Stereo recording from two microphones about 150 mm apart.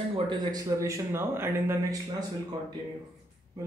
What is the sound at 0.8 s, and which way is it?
Speech, 20° right (ahead or behind).